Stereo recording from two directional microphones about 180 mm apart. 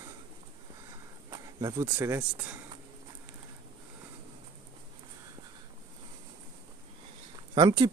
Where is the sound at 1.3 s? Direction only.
20° right (ahead or behind).